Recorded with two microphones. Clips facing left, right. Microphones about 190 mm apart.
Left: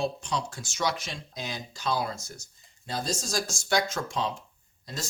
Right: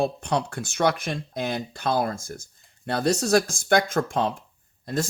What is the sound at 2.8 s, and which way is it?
Speech, 65° right (ahead or behind).